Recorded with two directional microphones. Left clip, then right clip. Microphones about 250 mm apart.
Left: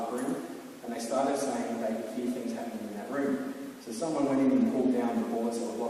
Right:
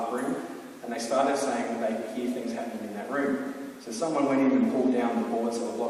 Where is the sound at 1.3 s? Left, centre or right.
Centre.